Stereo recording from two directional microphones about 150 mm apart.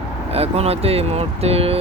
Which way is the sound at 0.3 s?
45° right (ahead or behind).